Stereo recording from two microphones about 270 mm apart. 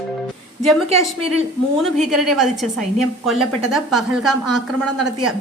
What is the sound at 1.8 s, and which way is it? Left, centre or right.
A woman's voice, centre.